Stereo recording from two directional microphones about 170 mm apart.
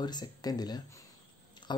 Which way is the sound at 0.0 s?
25° left (ahead or behind).